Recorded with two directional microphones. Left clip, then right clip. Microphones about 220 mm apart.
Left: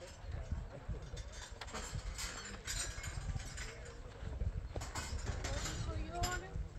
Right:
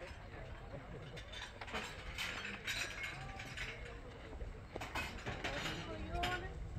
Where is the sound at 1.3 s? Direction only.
40° right (ahead or behind).